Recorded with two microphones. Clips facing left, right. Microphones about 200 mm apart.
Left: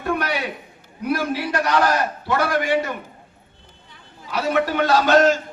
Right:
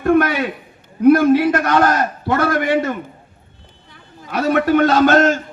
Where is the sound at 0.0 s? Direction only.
55° right (ahead or behind).